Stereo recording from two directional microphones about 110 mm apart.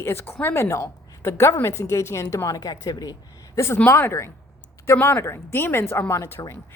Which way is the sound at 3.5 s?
20° left (ahead or behind).